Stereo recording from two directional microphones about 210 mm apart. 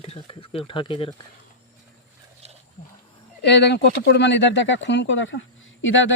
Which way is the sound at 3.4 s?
55° left (ahead or behind).